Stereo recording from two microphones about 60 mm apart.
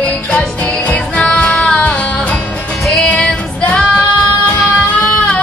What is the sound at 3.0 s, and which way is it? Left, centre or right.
Female singing, left.